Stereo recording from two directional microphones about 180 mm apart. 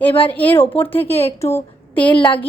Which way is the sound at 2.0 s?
25° left (ahead or behind).